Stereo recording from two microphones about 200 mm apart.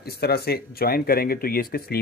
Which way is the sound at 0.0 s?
50° left (ahead or behind).